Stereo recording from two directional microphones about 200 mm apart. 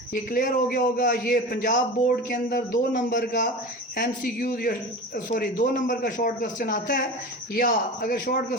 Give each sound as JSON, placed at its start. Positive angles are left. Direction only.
{"t": 0.1, "sound": "a man's voice", "side_deg": 45}